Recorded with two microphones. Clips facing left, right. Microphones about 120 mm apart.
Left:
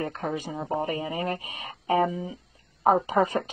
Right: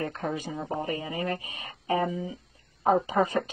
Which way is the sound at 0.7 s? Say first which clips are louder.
Left 4 dB; 30° left (ahead or behind).